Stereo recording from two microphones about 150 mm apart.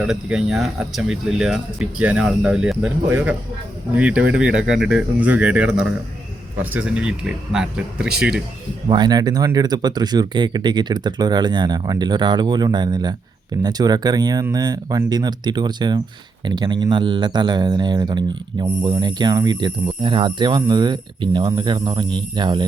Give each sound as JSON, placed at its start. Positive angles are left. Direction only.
{"t": 0.0, "sound": "speech", "side_deg": -5}
{"t": 8.9, "sound": "speech", "side_deg": -30}